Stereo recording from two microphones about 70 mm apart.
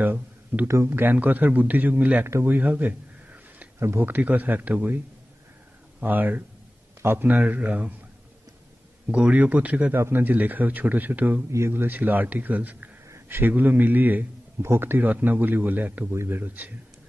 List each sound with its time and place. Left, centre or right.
0.0 s speech: right
0.7 s a man's voice: right
2.2 s a sound: right
3.8 s speech: right
4.1 s a man's voice: right
9.1 s a man's voice: right
9.9 s a man's voice: right
11.5 s a man's voice: right
16.1 s speech: right